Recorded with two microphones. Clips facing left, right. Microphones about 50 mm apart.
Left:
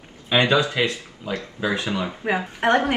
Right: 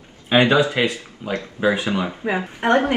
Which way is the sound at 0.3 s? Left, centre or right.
Right.